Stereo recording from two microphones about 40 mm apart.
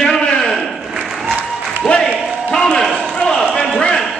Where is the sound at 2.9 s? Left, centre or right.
Left.